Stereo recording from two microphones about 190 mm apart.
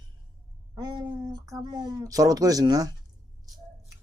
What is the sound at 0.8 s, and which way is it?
Speech, 20° right (ahead or behind).